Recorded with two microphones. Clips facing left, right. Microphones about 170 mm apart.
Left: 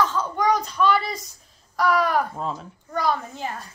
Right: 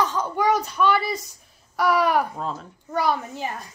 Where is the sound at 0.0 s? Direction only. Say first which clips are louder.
Even; 15° right (ahead or behind).